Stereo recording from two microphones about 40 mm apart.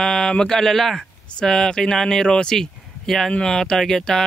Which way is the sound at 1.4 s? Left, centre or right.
Centre.